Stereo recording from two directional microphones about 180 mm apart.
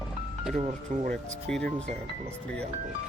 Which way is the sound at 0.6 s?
45° right (ahead or behind).